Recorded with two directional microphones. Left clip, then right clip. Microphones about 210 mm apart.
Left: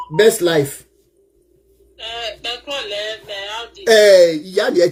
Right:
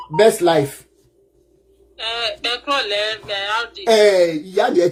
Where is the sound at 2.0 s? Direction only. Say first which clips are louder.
Right 4 dB; 45° right (ahead or behind).